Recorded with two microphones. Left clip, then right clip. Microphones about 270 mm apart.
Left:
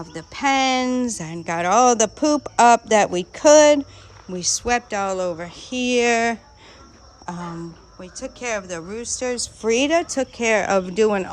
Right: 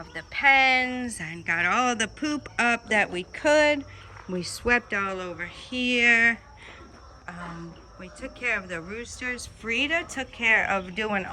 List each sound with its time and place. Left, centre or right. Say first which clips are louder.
0.3 s speech: even; left
4.3 s speech: left 3 dB; centre
8.0 s speech: left 1 dB; centre